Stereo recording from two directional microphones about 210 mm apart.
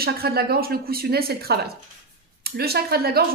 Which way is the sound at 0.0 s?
45° right (ahead or behind).